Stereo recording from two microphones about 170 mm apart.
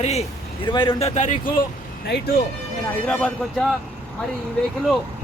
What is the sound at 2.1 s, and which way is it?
Speech, 75° left (ahead or behind).